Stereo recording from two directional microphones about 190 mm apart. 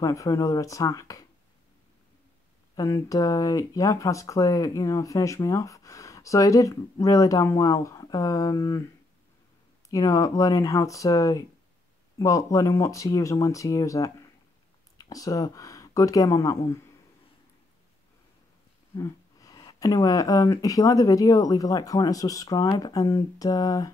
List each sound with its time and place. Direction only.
0.0 s speech: 15° left (ahead or behind)
2.7 s speech: 15° left (ahead or behind)
9.8 s speech: 15° left (ahead or behind)
18.9 s speech: 20° left (ahead or behind)